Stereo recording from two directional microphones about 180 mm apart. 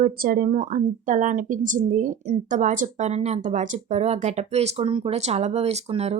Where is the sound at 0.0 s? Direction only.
55° right (ahead or behind).